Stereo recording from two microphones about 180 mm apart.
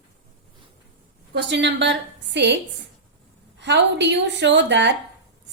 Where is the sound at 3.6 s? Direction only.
75° right (ahead or behind).